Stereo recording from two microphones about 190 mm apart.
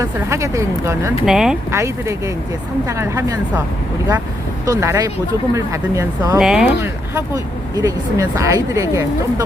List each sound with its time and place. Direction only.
0.0 s speech: 15° right (ahead or behind)
1.2 s speech: centre (ahead or behind)
1.7 s speech: 15° right (ahead or behind)
4.6 s speech: 15° right (ahead or behind)
6.4 s speech: 5° right (ahead or behind)